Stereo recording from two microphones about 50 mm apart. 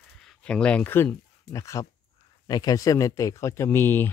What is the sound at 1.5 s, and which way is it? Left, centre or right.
Speech, left.